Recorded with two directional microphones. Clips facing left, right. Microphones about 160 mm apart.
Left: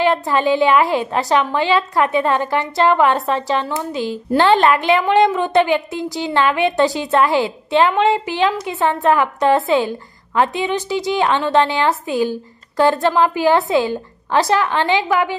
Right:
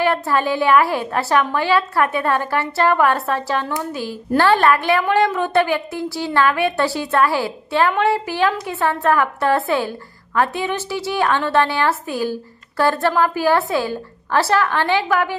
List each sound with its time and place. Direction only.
0.1 s a woman's voice: 15° left (ahead or behind)